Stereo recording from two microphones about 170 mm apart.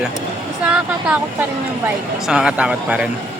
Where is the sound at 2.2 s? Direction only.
5° right (ahead or behind).